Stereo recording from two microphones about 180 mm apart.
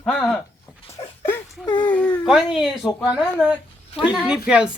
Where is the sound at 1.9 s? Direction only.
10° left (ahead or behind).